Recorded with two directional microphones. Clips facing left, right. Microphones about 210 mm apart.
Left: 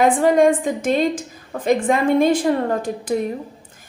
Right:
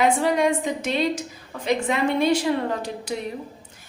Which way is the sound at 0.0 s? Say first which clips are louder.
Left 6 dB; 50° left (ahead or behind).